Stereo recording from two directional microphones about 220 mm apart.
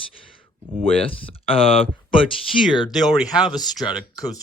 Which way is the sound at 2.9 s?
Centre (ahead or behind).